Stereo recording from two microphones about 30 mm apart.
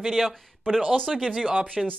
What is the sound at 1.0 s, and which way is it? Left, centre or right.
Speech, centre.